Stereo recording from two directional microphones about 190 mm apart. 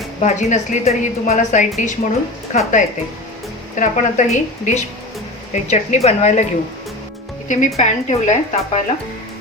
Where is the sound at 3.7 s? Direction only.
40° left (ahead or behind).